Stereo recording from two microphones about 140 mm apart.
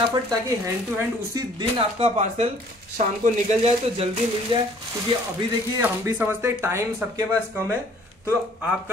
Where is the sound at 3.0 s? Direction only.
65° right (ahead or behind).